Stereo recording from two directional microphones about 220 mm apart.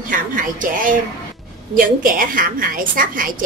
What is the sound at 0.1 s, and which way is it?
A woman's voice, 35° right (ahead or behind).